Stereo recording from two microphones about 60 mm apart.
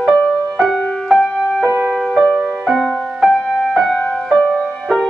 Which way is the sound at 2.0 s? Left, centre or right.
Centre.